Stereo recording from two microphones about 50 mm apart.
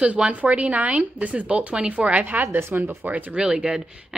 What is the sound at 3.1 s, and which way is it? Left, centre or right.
Speech, right.